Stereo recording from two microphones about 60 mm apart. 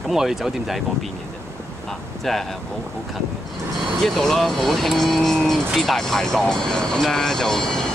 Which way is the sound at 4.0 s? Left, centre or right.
Centre.